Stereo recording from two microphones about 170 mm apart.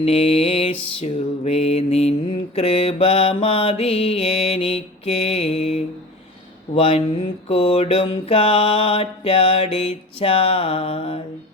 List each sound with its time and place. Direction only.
0.0 s mantra: 35° left (ahead or behind)